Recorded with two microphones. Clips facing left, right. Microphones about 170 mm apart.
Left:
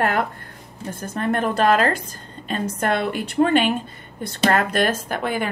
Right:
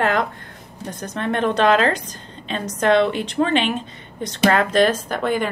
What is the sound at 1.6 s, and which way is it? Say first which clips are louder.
Speech: right 1 dB; 50° left (ahead or behind).